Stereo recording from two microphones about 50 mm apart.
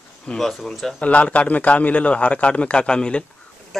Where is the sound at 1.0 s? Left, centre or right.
Left.